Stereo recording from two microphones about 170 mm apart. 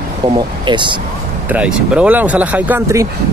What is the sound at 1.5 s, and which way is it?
Speech, 5° right (ahead or behind).